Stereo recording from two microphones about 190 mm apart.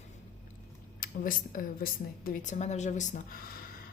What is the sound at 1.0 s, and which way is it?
A woman's voice, 45° left (ahead or behind).